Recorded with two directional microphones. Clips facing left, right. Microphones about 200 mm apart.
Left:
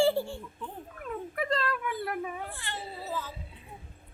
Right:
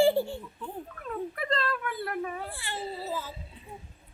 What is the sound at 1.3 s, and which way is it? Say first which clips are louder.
Speech: left 2 dB; 10° left (ahead or behind).